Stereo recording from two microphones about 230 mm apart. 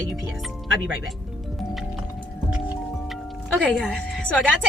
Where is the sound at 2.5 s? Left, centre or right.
Centre.